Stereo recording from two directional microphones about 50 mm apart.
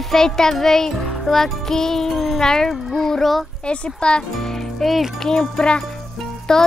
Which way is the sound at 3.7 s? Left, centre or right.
Centre.